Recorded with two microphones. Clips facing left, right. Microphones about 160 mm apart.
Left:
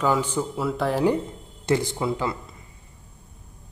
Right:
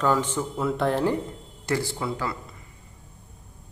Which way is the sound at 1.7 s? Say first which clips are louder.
Left 4 dB; 20° left (ahead or behind).